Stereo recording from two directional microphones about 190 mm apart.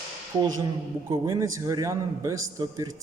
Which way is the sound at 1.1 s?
15° right (ahead or behind).